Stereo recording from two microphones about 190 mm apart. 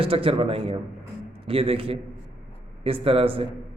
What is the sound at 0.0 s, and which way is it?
A man's voice, 30° right (ahead or behind).